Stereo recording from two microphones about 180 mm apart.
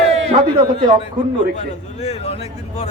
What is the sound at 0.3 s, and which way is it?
A man's voice, 30° right (ahead or behind).